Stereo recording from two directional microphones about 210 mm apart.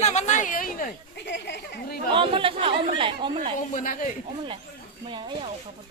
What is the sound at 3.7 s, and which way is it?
Speech, 40° left (ahead or behind).